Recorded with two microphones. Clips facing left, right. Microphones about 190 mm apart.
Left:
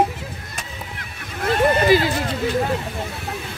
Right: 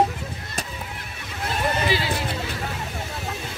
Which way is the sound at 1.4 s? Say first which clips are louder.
Left 7 dB; 55° left (ahead or behind).